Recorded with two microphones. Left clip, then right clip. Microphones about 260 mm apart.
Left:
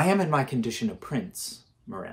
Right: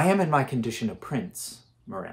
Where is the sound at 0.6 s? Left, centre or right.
Centre.